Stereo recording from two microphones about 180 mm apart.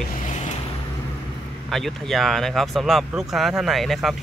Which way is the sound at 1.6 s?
Centre (ahead or behind).